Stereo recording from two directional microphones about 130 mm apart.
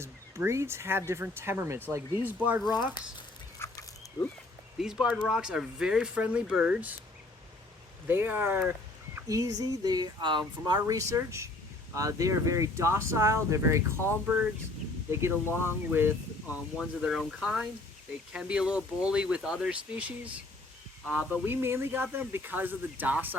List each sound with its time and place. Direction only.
0.0 s speech: 20° right (ahead or behind)
2.6 s speech: 35° left (ahead or behind)
3.6 s dog: 20° left (ahead or behind)
4.8 s speech: 5° right (ahead or behind)
8.0 s speech: 15° right (ahead or behind)
9.1 s speech: 25° right (ahead or behind)
15.1 s speech: 20° right (ahead or behind)
16.7 s speech: 5° right (ahead or behind)